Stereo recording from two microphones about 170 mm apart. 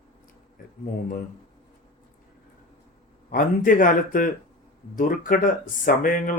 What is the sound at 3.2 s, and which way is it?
Speech, 50° left (ahead or behind).